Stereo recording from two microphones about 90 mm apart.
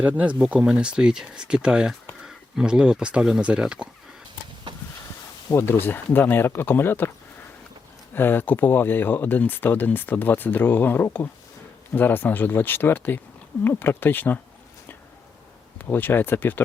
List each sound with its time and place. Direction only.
0.0 s speech: 15° right (ahead or behind)
5.5 s speech: 25° left (ahead or behind)
8.1 s speech: 25° left (ahead or behind)
15.8 s speech: 20° left (ahead or behind)